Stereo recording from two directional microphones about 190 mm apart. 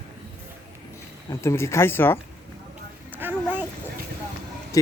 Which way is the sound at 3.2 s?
10° right (ahead or behind).